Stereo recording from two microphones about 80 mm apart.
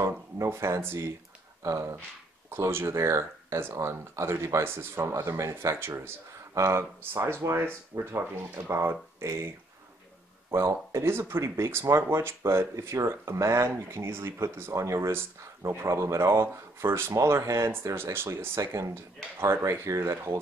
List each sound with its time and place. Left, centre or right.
0.0 s speech: right
10.5 s speech: right